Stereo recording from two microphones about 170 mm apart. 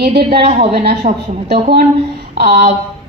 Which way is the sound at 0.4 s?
35° right (ahead or behind).